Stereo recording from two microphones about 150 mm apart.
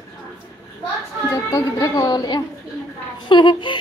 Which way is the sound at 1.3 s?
20° left (ahead or behind).